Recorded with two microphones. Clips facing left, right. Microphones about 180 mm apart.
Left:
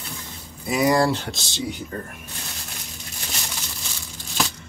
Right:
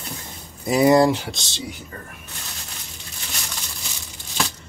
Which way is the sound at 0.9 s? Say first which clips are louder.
Right 5 dB; 20° right (ahead or behind).